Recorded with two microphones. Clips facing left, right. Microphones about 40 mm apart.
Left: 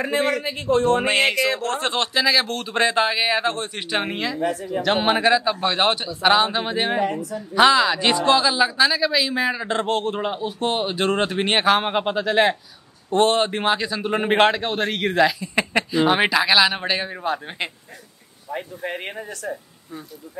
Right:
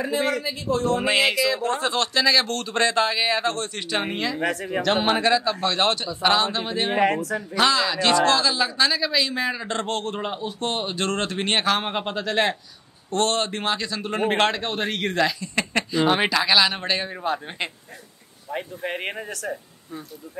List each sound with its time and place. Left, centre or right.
0.0 s a man's voice: left
1.5 s speech: left
2.1 s a man's voice: centre
4.4 s speech: right
4.8 s a man's voice: centre
7.0 s speech: right
7.5 s a man's voice: centre
19.1 s speech: right